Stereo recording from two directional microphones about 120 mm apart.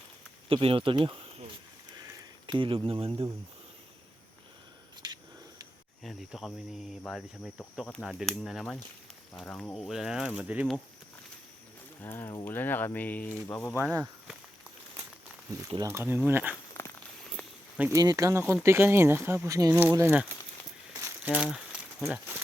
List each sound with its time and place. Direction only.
0.4 s speech: 50° right (ahead or behind)
2.5 s speech: 45° right (ahead or behind)
5.0 s a sound: 40° right (ahead or behind)
6.0 s speech: centre (ahead or behind)
9.7 s speech: centre (ahead or behind)
12.0 s speech: 20° left (ahead or behind)
13.7 s speech: 15° right (ahead or behind)
15.8 s speech: 20° right (ahead or behind)
16.8 s walk: 20° left (ahead or behind)
17.9 s speech: 30° right (ahead or behind)
19.9 s speech: 15° right (ahead or behind)
21.2 s a sound: 10° right (ahead or behind)